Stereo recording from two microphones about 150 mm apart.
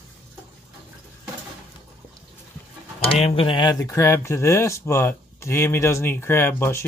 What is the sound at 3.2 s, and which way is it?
Speech, 40° left (ahead or behind).